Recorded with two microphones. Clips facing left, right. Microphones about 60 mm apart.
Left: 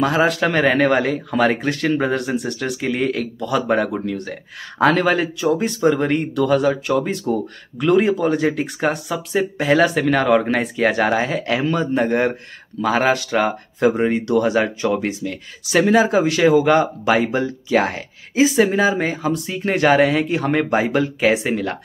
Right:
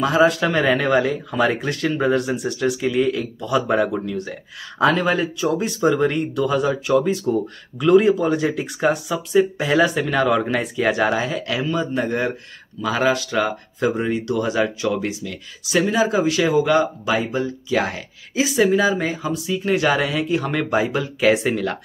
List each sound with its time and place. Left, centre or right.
0.0 s speech: left
5.9 s speech: left
17.7 s speech: left
21.2 s speech: left